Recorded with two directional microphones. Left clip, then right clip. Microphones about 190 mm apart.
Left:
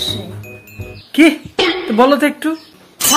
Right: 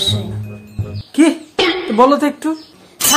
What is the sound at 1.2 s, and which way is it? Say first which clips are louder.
Cough: left 2 dB; centre (ahead or behind).